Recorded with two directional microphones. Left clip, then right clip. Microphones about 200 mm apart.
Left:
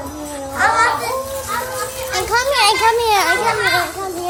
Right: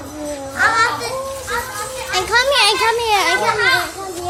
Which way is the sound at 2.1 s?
15° right (ahead or behind).